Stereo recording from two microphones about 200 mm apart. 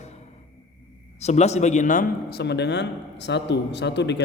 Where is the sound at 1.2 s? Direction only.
35° left (ahead or behind); by 4.2 s 60° left (ahead or behind).